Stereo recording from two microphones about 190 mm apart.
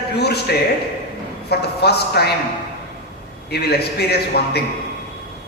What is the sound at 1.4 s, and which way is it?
Speech, 60° left (ahead or behind).